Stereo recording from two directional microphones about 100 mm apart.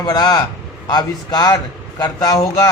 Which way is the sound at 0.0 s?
45° left (ahead or behind).